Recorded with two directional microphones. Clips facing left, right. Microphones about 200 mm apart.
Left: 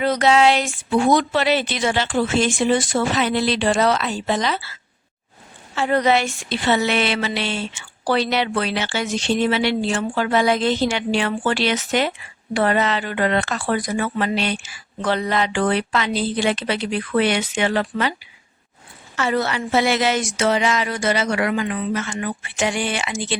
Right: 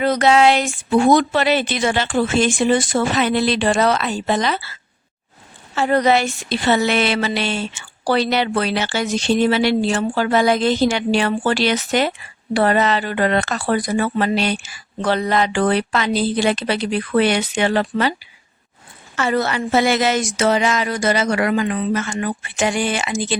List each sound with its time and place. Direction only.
0.0 s speech: 50° right (ahead or behind)
5.7 s a woman's voice: 40° right (ahead or behind)
19.1 s speech: 45° right (ahead or behind)